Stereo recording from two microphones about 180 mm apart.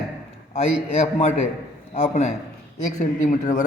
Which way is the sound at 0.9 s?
40° left (ahead or behind).